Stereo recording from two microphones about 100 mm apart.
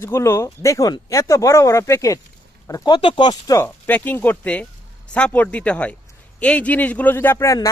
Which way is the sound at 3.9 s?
15° left (ahead or behind).